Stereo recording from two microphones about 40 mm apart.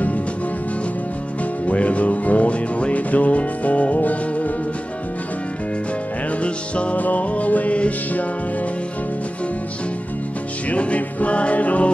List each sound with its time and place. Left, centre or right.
1.7 s music: left
6.4 s music: left
10.7 s music: left